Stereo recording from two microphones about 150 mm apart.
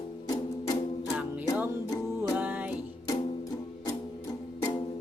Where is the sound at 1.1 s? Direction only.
10° right (ahead or behind).